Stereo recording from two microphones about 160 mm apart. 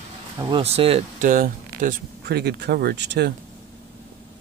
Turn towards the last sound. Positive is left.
turn(degrees=-90)